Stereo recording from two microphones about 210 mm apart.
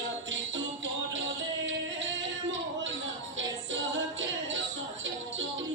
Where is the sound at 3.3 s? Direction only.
60° right (ahead or behind).